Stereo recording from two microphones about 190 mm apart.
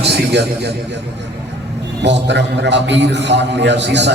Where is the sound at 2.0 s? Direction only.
65° right (ahead or behind).